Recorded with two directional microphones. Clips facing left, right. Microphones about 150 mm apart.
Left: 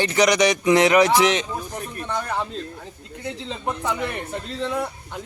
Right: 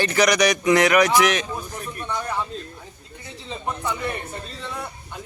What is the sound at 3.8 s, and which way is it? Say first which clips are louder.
Speech: left 1 dB; 90° left.